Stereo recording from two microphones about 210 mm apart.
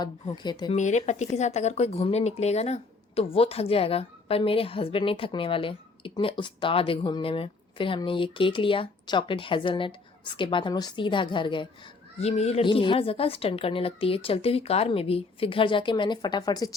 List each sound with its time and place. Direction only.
0.0 s speech: 20° left (ahead or behind)
0.8 s speech: 35° left (ahead or behind); by 16.7 s 20° left (ahead or behind)